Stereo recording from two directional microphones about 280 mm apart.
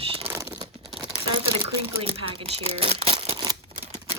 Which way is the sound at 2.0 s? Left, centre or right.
Centre.